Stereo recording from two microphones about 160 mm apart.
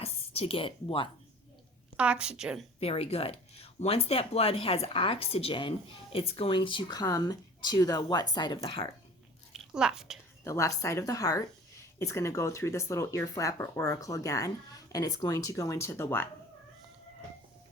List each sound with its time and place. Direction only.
0.0 s a woman's voice: 40° left (ahead or behind)
2.0 s speech: 5° right (ahead or behind)
2.8 s speech: 40° left (ahead or behind)
9.5 s a sound: 5° right (ahead or behind)
10.4 s speech: 20° left (ahead or behind)